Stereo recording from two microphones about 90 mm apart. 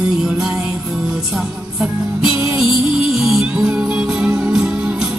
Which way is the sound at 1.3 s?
5° right (ahead or behind).